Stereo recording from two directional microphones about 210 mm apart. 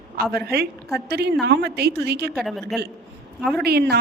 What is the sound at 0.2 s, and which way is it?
A woman's voice, 50° right (ahead or behind).